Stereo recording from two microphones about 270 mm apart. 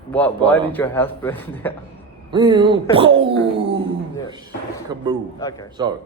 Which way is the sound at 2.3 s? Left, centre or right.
Centre.